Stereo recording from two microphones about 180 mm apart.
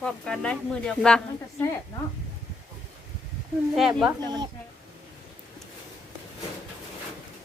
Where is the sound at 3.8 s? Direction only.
Centre (ahead or behind).